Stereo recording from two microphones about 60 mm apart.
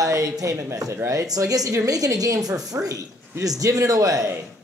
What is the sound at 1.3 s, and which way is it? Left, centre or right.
A woman's voice, right.